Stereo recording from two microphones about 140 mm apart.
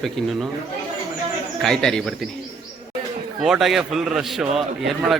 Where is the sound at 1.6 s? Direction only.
5° left (ahead or behind).